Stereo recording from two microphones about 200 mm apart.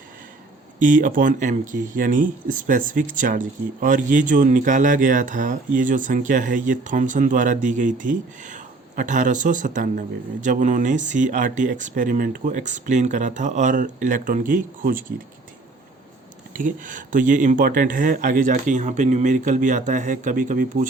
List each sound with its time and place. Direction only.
0.8 s speech: 40° right (ahead or behind)
16.6 s speech: 40° right (ahead or behind)